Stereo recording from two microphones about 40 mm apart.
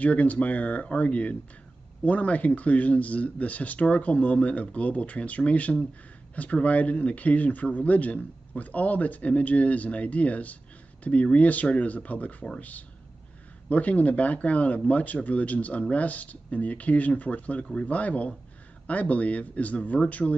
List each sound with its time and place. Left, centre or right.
0.0 s speech: left